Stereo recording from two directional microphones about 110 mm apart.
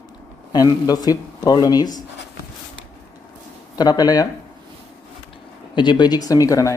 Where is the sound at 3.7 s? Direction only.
35° left (ahead or behind).